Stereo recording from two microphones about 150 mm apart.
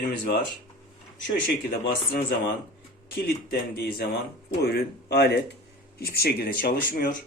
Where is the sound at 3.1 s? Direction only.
90° left; by 7.2 s 70° left (ahead or behind).